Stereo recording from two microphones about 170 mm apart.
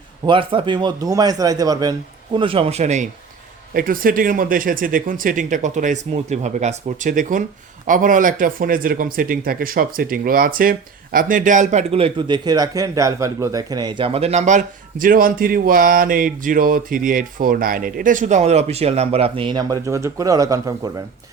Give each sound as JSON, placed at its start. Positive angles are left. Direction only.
{"t": 0.3, "sound": "a man's voice", "side_deg": -30}
{"t": 3.8, "sound": "speech", "side_deg": -55}